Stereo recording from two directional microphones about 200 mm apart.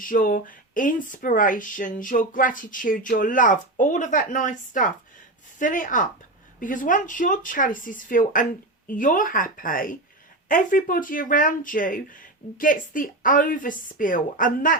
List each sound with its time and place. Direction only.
0.0 s speech: 45° left (ahead or behind)